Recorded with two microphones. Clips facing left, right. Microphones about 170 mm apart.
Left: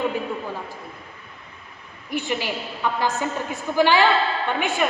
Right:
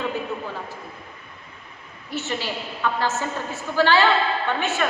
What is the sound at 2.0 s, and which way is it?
A woman's voice, 15° left (ahead or behind).